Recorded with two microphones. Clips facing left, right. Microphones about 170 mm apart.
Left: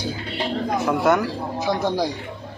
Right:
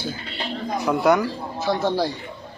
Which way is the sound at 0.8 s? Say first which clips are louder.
Right 1 dB; centre (ahead or behind).